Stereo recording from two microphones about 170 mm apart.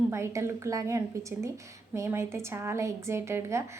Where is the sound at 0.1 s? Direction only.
15° right (ahead or behind).